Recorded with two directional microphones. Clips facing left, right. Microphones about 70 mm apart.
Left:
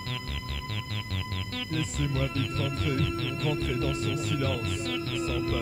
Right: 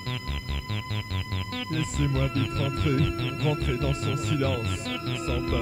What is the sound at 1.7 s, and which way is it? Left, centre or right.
Speech, right.